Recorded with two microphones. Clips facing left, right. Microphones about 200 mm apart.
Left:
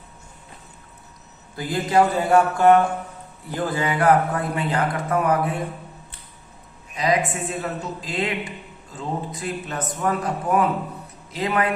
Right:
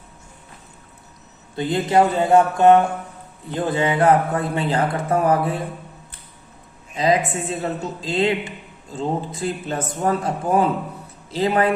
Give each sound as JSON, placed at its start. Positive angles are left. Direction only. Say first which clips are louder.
{"t": 1.5, "sound": "speech", "louder": "right 2 dB", "side_deg": -25}
{"t": 6.9, "sound": "a woman's voice", "louder": "right 3 dB", "side_deg": -30}